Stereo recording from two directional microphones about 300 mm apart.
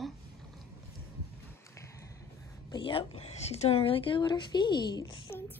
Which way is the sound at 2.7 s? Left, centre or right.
Centre.